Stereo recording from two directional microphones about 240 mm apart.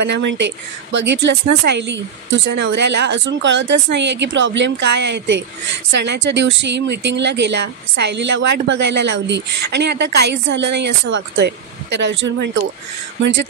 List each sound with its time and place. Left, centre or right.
0.0 s speech: right